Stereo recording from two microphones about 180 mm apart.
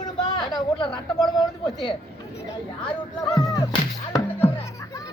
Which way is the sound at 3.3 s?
Centre (ahead or behind).